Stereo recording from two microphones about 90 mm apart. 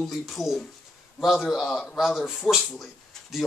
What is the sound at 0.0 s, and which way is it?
Speech, centre (ahead or behind).